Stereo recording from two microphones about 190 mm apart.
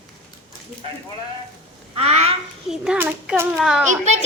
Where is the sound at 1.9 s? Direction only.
35° right (ahead or behind).